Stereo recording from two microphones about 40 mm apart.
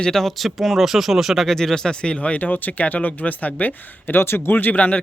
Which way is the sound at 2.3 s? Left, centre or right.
Left.